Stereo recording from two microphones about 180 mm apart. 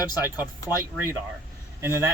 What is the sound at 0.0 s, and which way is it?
Speech, 10° right (ahead or behind).